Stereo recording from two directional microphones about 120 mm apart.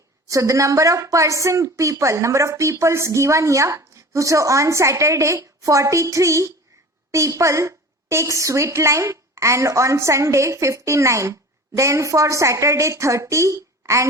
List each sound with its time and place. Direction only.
0.3 s a woman's voice: 25° right (ahead or behind)